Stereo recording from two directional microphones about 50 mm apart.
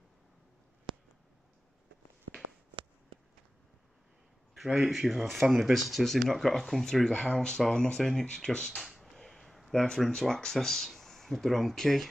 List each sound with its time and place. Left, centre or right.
4.7 s speech: centre
7.1 s speech: centre
7.3 s speech: centre